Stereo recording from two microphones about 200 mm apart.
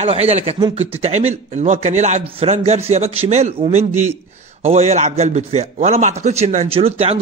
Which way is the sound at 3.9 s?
10° right (ahead or behind).